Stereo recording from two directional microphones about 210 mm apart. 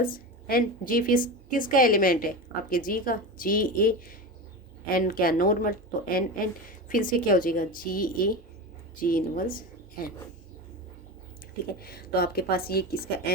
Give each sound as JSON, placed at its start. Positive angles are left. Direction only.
{"t": 0.0, "sound": "a woman's voice", "side_deg": 45}
{"t": 11.8, "sound": "a woman's voice", "side_deg": 45}